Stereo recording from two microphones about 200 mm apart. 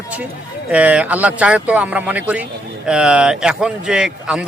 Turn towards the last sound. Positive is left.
turn(degrees=-5)  # may be behind; listen again after turning